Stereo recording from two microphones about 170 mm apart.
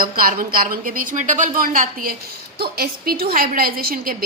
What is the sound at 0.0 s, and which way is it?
A woman's voice, 60° right (ahead or behind).